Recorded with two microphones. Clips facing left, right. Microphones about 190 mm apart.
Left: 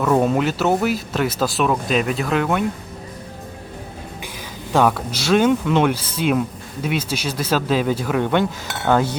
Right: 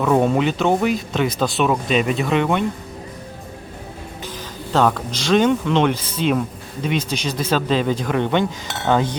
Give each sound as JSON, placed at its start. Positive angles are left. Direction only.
{"t": 0.0, "sound": "speech", "side_deg": 0}
{"t": 4.7, "sound": "speech", "side_deg": 10}